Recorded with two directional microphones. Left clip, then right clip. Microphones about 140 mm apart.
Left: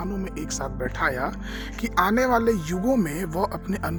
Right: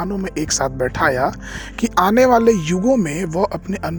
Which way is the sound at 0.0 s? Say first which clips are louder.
Right 9 dB; 40° right (ahead or behind).